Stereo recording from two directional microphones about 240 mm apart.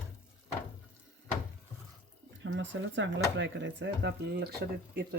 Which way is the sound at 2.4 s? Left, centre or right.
Right.